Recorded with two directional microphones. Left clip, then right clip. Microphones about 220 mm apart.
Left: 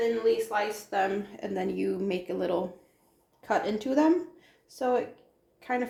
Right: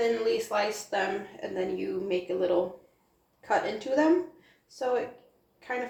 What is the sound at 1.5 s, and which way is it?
Speech, 50° left (ahead or behind).